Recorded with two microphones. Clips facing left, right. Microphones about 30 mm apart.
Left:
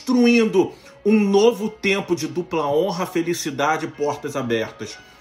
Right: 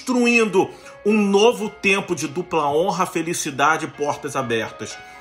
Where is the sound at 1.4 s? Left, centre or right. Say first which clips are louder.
Right 1 dB; right.